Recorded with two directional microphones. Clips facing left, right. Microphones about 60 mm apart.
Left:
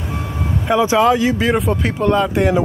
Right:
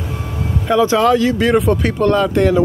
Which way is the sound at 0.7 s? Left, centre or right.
Centre.